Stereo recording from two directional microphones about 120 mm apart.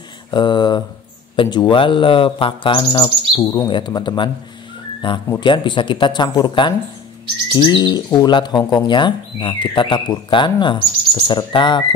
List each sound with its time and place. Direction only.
0.3 s speech: 40° left (ahead or behind)